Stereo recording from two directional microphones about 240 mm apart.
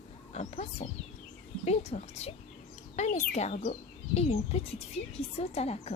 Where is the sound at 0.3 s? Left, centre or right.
Left.